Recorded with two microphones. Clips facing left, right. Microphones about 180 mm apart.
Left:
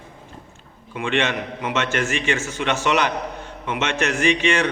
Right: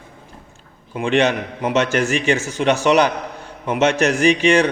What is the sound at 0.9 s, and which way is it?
Mantra, 40° right (ahead or behind).